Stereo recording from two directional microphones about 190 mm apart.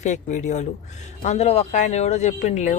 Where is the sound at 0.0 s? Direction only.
40° left (ahead or behind).